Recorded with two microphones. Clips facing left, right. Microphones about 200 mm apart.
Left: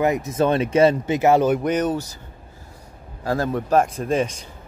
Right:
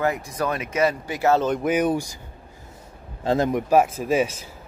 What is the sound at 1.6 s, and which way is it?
Speech, 10° right (ahead or behind).